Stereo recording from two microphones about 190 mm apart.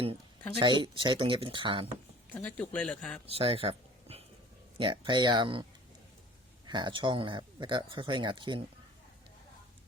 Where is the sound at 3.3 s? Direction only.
30° right (ahead or behind).